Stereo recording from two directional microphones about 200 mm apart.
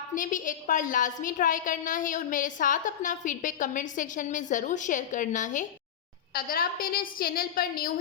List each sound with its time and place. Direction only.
0.1 s a woman's voice: 40° left (ahead or behind)